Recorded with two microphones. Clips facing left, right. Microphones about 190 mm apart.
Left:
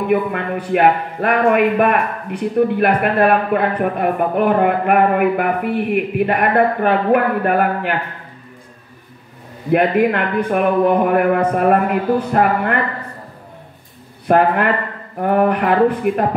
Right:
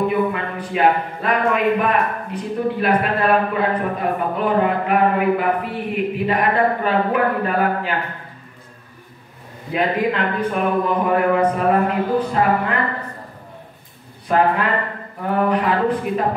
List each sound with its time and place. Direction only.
0.1 s a man's voice: 60° left (ahead or behind)
9.7 s a man's voice: 60° left (ahead or behind)
14.2 s a man's voice: 60° left (ahead or behind)